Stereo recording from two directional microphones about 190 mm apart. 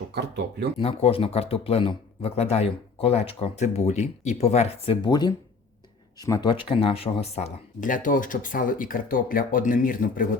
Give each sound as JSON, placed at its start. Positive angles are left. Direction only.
{"t": 0.1, "sound": "speech", "side_deg": -60}
{"t": 0.8, "sound": "speech", "side_deg": 30}
{"t": 5.0, "sound": "speech", "side_deg": 20}